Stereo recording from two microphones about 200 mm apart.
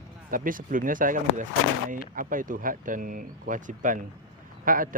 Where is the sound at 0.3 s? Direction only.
45° right (ahead or behind).